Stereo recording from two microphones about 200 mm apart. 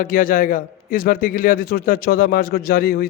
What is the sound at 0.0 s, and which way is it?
A man's voice, 45° left (ahead or behind).